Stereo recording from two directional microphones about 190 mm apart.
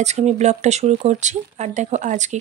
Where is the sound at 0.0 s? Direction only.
35° right (ahead or behind).